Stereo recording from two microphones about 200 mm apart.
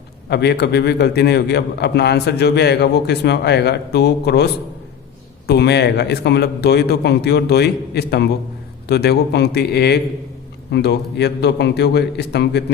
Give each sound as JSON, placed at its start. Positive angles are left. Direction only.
{"t": 0.3, "sound": "a man's voice", "side_deg": 55}
{"t": 5.5, "sound": "a man's voice", "side_deg": 55}